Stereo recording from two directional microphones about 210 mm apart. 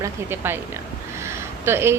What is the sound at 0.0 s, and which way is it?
A woman's voice, 10° right (ahead or behind).